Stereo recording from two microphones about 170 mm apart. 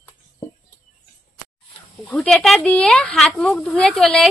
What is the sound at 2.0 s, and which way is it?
Speech, 5° left (ahead or behind).